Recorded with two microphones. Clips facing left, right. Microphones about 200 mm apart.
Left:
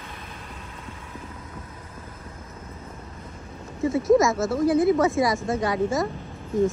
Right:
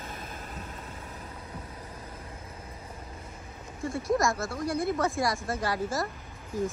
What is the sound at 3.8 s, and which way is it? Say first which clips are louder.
Speech: left 9 dB; centre (ahead or behind).